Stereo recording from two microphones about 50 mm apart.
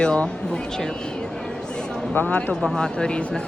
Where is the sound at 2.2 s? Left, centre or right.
Left.